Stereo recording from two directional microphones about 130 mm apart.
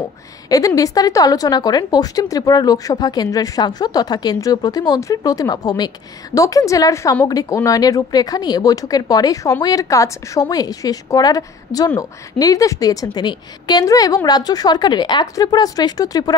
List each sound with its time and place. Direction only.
0.5 s a woman's voice: 25° left (ahead or behind)